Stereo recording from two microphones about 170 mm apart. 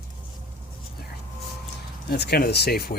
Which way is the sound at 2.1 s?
65° left (ahead or behind).